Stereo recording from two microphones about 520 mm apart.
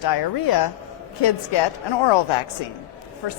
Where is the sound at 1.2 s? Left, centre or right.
Left.